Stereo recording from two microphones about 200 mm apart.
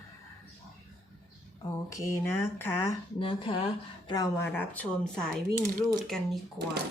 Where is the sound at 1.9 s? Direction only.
10° left (ahead or behind).